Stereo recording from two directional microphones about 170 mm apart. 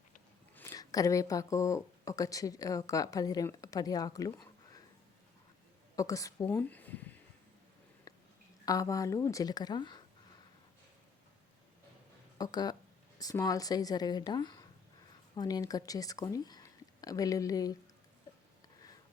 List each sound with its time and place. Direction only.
0.5 s speech: 20° left (ahead or behind)
6.0 s speech: 20° left (ahead or behind)
6.5 s a sound: 10° left (ahead or behind)
8.6 s speech: 20° left (ahead or behind)
12.4 s speech: 25° left (ahead or behind)